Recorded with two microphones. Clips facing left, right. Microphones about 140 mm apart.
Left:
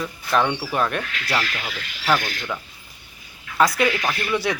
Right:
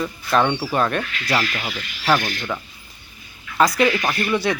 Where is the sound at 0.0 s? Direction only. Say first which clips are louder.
Right 2 dB; centre (ahead or behind).